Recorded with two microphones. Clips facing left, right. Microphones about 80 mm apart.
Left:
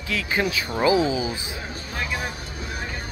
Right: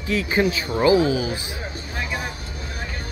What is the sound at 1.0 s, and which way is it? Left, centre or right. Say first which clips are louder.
Speech: right 2 dB; centre.